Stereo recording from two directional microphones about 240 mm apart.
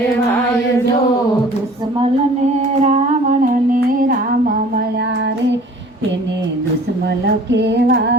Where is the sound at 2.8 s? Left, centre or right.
Right.